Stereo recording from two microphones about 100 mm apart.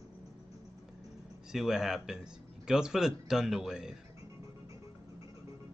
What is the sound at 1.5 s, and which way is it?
Speech, 5° right (ahead or behind).